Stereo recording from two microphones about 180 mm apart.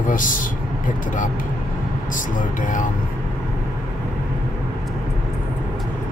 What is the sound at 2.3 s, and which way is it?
Speech, 45° left (ahead or behind).